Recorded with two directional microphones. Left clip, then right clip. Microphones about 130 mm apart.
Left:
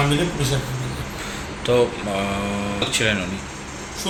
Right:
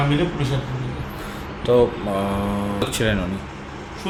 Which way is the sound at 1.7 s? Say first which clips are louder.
Right 2 dB; 45° right (ahead or behind).